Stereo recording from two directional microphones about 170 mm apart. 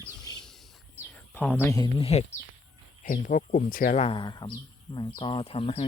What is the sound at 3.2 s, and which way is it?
Speech, 55° left (ahead or behind).